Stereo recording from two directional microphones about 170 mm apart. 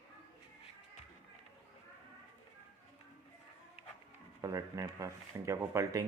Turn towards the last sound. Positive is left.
turn(degrees=-20)  # may be behind; listen again after turning